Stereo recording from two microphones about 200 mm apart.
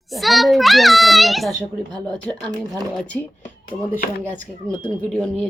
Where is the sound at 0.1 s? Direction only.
Centre (ahead or behind).